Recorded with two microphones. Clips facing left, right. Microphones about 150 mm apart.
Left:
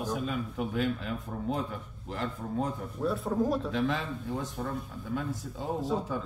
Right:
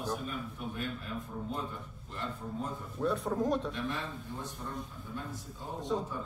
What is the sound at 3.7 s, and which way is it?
A man's voice, 90° left.